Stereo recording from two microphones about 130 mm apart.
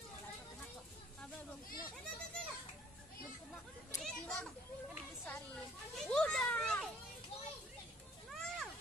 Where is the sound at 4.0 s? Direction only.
5° left (ahead or behind).